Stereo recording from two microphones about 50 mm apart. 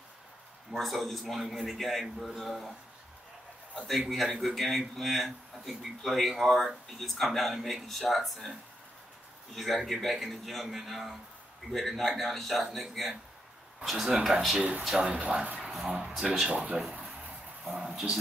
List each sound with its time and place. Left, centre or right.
0.7 s a man's voice: centre
4.1 s a man's voice: centre
9.5 s a man's voice: centre; by 15.7 s right
15.7 s speech: centre
16.4 s speech: right
17.7 s speech: centre